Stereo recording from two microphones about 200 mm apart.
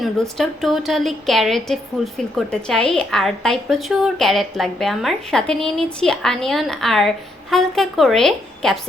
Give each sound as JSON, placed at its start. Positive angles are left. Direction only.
{"t": 0.0, "sound": "a woman's voice", "side_deg": 0}